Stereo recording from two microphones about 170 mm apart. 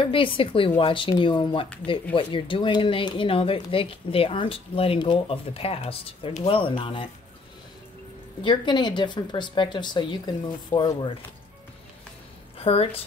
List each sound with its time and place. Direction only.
0.0 s speech: 30° left (ahead or behind)
8.4 s speech: 30° left (ahead or behind)
12.5 s a woman's voice: 35° left (ahead or behind)